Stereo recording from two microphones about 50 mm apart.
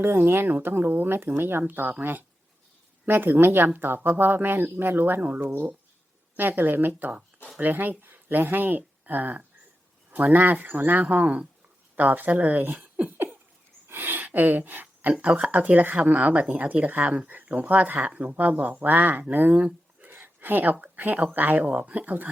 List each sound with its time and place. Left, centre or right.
0.0 s speech: right
13.8 s a sound: right
14.3 s speech: right
15.2 s speech: right
18.1 s speech: right
19.5 s a sound: right
20.1 s a sound: right
20.8 s speech: right
21.6 s speech: right